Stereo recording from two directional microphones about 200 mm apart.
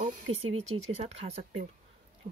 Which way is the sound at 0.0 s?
30° right (ahead or behind).